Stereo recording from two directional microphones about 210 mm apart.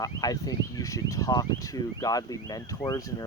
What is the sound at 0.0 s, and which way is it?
Speech, 15° left (ahead or behind).